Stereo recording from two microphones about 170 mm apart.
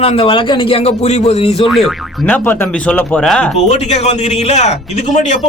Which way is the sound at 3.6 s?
40° left (ahead or behind).